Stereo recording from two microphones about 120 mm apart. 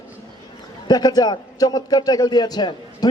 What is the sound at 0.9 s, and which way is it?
A man's voice, 35° left (ahead or behind).